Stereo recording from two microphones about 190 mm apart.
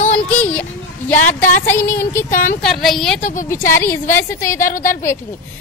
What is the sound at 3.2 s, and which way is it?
Speech, 40° left (ahead or behind).